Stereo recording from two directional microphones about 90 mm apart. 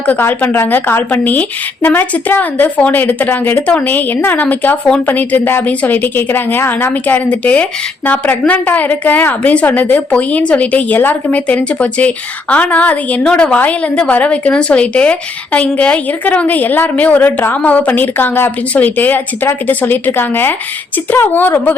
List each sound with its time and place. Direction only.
0.0 s speech: 20° left (ahead or behind)